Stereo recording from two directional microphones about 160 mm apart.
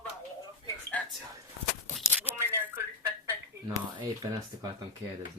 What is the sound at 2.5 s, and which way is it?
Tick-tock, 15° right (ahead or behind).